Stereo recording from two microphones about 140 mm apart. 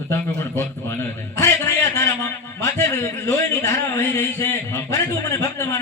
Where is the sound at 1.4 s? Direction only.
20° left (ahead or behind).